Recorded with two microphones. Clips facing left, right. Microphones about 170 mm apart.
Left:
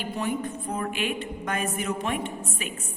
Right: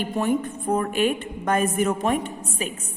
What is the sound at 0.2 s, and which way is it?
A woman's voice, 50° right (ahead or behind).